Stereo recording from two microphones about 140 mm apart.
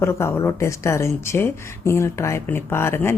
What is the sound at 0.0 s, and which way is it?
Speech, 20° left (ahead or behind).